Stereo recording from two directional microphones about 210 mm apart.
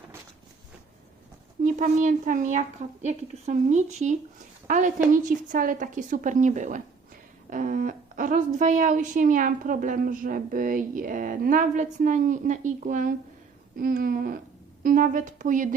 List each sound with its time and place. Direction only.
1.6 s a woman's voice: 40° right (ahead or behind)
13.7 s a sound: 40° right (ahead or behind)
14.8 s a woman's voice: 40° right (ahead or behind)